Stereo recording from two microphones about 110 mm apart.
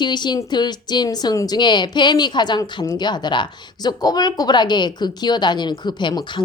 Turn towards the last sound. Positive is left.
turn(degrees=40)  # may be behind; listen again after turning